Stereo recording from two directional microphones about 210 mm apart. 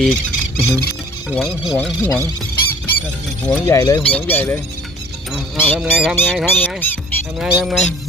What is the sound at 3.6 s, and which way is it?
Speech, 15° left (ahead or behind).